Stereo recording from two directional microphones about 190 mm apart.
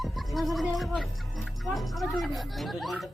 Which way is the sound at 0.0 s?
Centre (ahead or behind).